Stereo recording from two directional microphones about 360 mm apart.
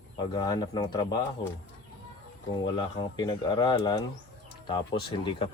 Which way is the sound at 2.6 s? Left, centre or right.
Centre.